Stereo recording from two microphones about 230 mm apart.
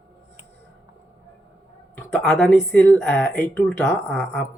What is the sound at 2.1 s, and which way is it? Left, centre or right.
A woman's voice, centre.